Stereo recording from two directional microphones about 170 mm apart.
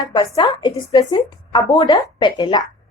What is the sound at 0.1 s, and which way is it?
A woman's voice, 25° left (ahead or behind).